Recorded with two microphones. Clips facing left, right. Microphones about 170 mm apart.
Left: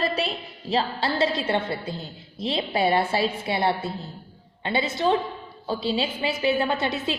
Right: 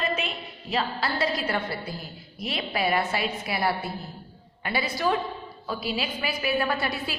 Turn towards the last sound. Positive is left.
turn(degrees=20)  # may be behind; listen again after turning